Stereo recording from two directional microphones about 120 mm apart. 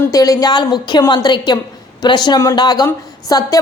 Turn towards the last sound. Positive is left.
turn(degrees=30)  # may be behind; listen again after turning